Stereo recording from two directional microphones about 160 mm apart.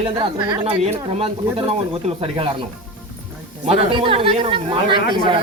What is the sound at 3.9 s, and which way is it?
A woman's voice, 35° right (ahead or behind).